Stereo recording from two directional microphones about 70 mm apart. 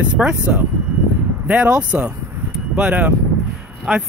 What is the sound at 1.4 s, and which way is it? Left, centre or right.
Speech, centre.